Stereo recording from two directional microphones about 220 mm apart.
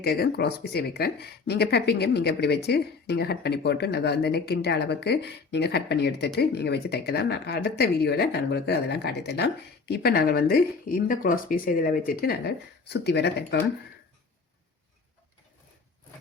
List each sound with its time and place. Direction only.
0.0 s speech: 45° left (ahead or behind)